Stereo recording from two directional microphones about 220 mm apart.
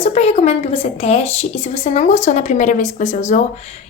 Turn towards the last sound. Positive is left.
turn(degrees=30)  # may be behind; listen again after turning